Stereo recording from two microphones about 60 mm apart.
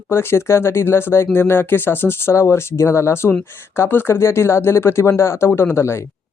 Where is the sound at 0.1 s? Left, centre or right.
Left.